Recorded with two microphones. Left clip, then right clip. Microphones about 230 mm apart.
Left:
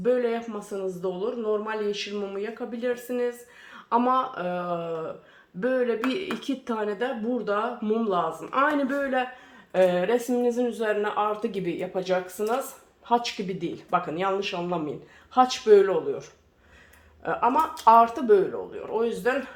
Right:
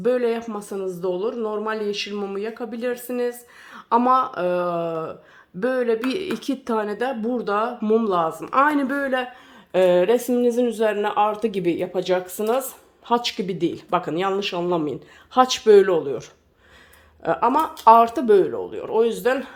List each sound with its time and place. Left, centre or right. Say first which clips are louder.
0.0 s speech: right 3 dB; right